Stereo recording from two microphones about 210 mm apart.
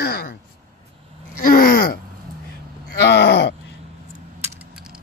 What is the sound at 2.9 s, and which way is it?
Groan, 50° left (ahead or behind).